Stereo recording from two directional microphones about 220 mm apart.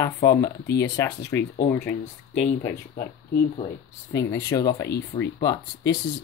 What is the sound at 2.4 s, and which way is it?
Speech, 35° left (ahead or behind).